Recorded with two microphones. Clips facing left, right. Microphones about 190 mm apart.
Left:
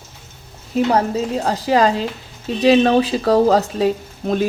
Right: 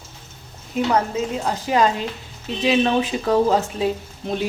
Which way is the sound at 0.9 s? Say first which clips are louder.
Left 1 dB; 35° left (ahead or behind).